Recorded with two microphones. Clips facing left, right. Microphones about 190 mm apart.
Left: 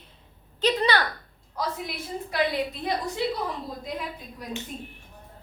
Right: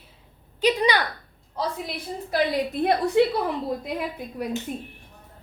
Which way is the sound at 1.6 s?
25° right (ahead or behind).